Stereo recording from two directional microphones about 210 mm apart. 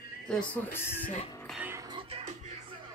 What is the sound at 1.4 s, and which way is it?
Music, 5° right (ahead or behind).